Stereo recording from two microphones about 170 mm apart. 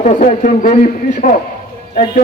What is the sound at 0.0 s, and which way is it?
Speech, 50° left (ahead or behind).